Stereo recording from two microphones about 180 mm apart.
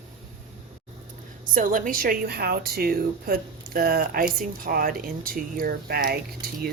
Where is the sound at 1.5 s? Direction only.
50° right (ahead or behind).